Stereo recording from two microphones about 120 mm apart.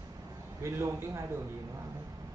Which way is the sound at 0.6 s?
20° right (ahead or behind).